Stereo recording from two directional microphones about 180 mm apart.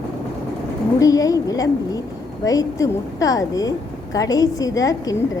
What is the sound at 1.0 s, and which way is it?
A woman's voice, 20° left (ahead or behind).